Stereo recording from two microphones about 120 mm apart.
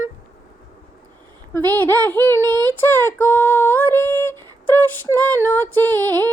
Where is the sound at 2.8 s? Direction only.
20° left (ahead or behind).